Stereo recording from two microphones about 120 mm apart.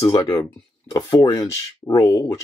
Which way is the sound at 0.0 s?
35° left (ahead or behind).